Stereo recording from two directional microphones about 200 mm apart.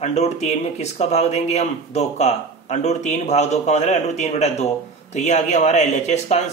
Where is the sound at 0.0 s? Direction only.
35° left (ahead or behind).